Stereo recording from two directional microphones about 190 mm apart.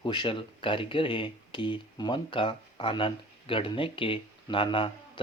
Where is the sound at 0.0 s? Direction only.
25° left (ahead or behind).